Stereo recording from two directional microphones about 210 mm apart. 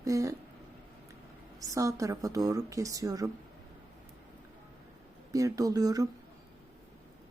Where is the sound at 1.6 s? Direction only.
15° right (ahead or behind).